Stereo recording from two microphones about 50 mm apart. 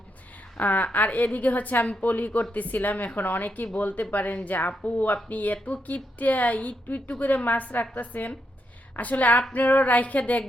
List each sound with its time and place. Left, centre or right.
0.5 s a woman's voice: left